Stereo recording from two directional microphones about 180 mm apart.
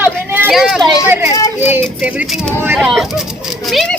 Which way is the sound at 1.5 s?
10° right (ahead or behind).